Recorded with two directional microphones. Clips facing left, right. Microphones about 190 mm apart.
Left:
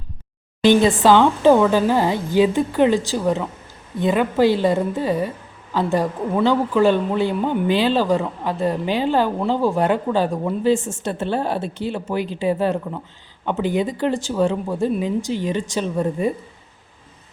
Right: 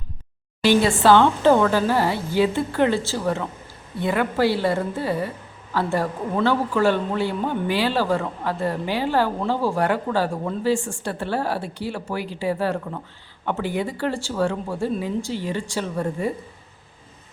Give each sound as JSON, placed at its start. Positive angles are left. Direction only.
{"t": 0.6, "sound": "a man's voice", "side_deg": 20}